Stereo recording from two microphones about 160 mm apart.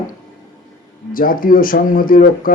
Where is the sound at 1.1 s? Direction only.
60° left (ahead or behind).